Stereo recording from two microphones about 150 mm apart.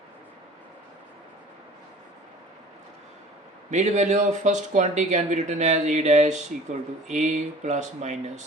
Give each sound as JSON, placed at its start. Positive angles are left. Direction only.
{"t": 3.7, "sound": "speech", "side_deg": -50}